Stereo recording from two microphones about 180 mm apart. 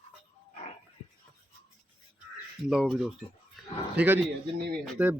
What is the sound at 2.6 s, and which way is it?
A man's voice, centre (ahead or behind).